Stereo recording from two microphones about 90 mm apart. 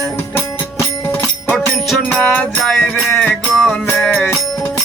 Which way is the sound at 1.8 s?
Centre (ahead or behind).